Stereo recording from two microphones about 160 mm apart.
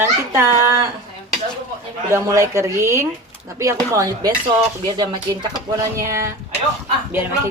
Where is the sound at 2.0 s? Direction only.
20° right (ahead or behind).